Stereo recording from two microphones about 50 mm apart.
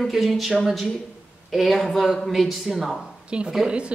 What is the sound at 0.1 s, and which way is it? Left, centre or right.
Speech, centre.